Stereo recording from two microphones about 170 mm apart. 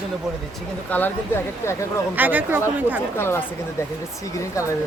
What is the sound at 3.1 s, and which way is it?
Speech, 15° left (ahead or behind).